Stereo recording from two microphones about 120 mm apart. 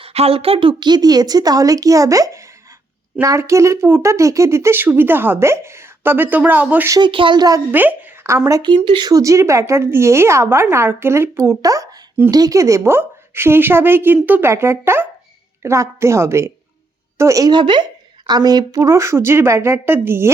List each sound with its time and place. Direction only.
0.0 s speech: 55° right (ahead or behind); by 6.9 s 15° right (ahead or behind)
6.9 s speech: 40° right (ahead or behind)
7.7 s a sound: 15° right (ahead or behind)
8.4 s speech: 35° right (ahead or behind); by 20.3 s 20° right (ahead or behind)